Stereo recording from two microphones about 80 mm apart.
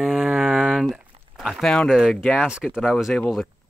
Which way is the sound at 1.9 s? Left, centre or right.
Centre.